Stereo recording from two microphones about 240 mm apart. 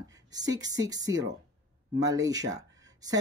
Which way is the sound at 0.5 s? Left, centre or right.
Centre.